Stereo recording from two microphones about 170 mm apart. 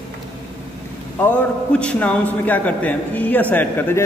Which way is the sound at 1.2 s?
10° left (ahead or behind).